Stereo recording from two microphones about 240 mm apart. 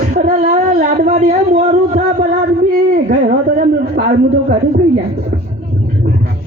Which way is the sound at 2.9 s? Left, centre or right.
Right.